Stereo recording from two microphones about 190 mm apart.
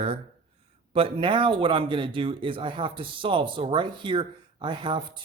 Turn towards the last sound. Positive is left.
turn(degrees=-25)  # may be behind; listen again after turning